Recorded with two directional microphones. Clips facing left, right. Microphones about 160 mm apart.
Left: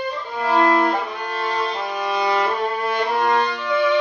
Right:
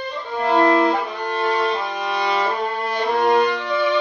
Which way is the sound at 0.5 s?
25° right (ahead or behind).